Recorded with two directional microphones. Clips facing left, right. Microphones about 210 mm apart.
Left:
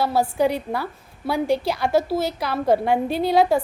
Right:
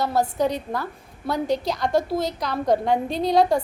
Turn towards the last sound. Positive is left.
turn(degrees=5)  # may be behind; listen again after turning